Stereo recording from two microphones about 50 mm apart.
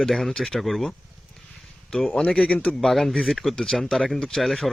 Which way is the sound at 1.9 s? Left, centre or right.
Centre.